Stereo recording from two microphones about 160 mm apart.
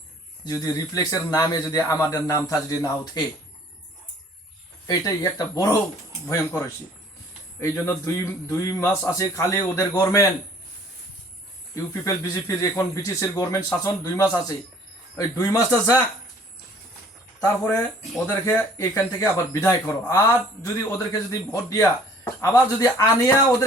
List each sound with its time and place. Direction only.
0.4 s a man's voice: 25° left (ahead or behind)
4.9 s a man's voice: 25° left (ahead or behind)
6.2 s a man's voice: 10° left (ahead or behind)
11.7 s a man's voice: 20° left (ahead or behind)
17.4 s a man's voice: 15° left (ahead or behind)